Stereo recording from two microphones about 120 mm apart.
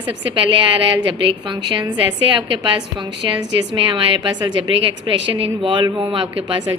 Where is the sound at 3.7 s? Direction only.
45° right (ahead or behind).